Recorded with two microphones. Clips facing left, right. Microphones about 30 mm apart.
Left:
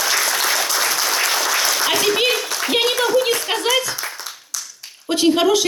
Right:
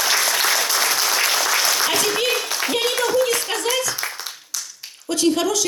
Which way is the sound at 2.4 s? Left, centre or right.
Centre.